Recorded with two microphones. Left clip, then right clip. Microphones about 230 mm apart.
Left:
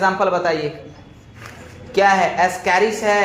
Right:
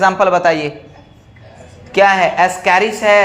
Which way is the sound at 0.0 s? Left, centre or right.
Right.